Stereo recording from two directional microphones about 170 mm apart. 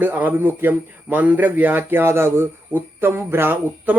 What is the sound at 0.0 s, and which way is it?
Speech, 10° right (ahead or behind).